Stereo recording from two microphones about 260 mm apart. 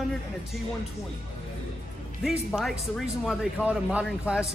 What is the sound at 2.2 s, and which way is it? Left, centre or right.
Speech, centre.